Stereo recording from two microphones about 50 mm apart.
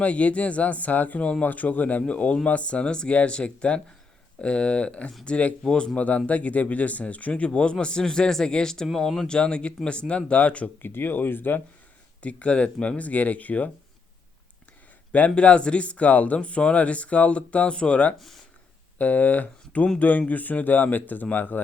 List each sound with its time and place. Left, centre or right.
0.0 s speech: left; by 9.2 s centre
9.2 s speech: centre
10.8 s speech: left
12.2 s speech: left
15.4 s speech: left